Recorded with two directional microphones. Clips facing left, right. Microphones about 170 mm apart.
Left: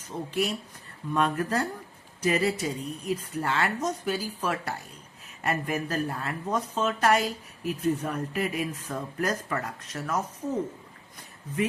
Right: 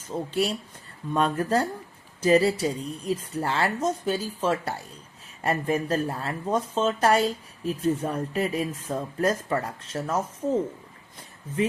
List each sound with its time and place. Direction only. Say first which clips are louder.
0.0 s speech: right 3 dB; 30° right (ahead or behind)